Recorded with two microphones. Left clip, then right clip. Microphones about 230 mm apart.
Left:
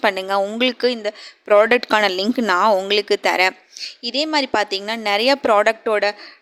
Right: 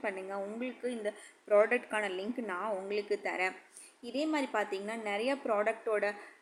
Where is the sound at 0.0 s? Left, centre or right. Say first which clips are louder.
Left 19 dB; left.